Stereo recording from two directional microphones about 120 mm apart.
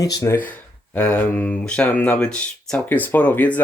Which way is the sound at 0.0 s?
30° left (ahead or behind).